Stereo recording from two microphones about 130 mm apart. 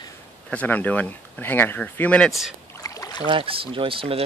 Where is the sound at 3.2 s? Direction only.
45° right (ahead or behind).